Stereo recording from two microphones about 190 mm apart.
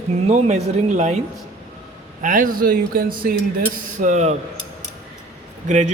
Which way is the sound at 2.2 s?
45° right (ahead or behind).